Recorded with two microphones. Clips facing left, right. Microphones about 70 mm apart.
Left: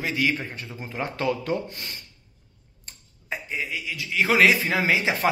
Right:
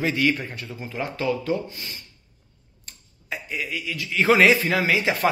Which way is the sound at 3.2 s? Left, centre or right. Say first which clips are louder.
Even; left.